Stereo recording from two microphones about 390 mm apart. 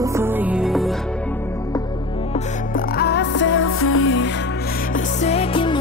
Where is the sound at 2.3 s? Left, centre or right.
Left.